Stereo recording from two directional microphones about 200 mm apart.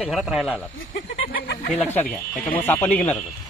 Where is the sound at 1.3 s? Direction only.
50° left (ahead or behind).